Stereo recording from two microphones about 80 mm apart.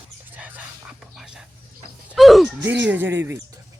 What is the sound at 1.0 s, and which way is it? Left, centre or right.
Whispering, centre.